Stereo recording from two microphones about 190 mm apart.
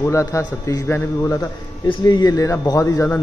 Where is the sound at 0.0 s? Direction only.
15° left (ahead or behind).